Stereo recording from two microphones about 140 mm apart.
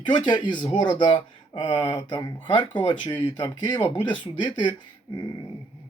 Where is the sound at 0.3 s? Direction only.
35° left (ahead or behind).